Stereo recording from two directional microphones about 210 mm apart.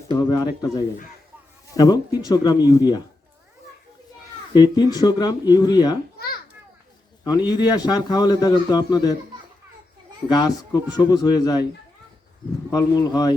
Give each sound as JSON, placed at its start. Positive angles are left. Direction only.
{"t": 0.1, "sound": "speech", "side_deg": 20}
{"t": 4.5, "sound": "a man's voice", "side_deg": 20}
{"t": 7.4, "sound": "a man's voice", "side_deg": 20}
{"t": 10.4, "sound": "speech", "side_deg": 20}
{"t": 12.7, "sound": "speech", "side_deg": 20}